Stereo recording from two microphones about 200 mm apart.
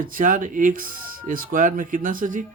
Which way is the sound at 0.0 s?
40° right (ahead or behind).